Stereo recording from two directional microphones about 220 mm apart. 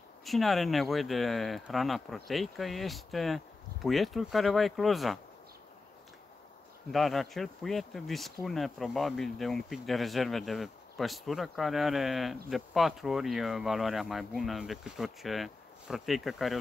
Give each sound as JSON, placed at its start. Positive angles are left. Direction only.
{"t": 0.2, "sound": "speech", "side_deg": 0}
{"t": 6.9, "sound": "speech", "side_deg": 0}